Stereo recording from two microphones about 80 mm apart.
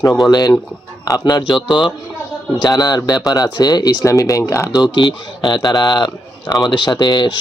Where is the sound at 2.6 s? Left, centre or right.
Left.